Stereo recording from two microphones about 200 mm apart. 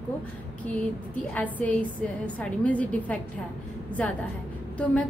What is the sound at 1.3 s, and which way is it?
A woman's voice, 5° left (ahead or behind).